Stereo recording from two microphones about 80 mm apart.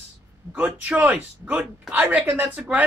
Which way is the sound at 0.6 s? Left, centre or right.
Centre.